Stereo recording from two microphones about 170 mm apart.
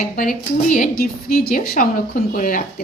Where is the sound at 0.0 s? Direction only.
55° left (ahead or behind).